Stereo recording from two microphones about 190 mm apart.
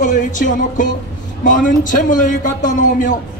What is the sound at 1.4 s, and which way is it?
Speech, 45° left (ahead or behind).